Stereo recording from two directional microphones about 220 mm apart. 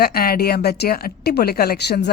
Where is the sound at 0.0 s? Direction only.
45° left (ahead or behind).